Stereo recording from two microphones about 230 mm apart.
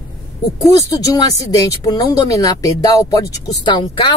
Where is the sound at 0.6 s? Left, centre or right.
Centre.